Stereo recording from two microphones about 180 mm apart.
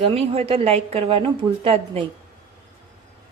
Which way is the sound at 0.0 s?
30° right (ahead or behind).